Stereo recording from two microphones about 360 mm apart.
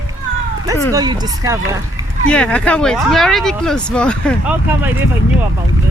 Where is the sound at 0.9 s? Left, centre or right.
Centre.